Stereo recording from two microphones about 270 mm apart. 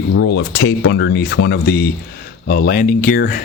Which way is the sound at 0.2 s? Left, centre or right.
Left.